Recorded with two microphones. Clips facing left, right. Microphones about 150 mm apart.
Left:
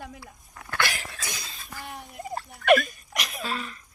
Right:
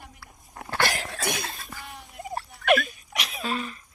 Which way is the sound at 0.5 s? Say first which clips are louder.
Right 3 dB; 35° right (ahead or behind).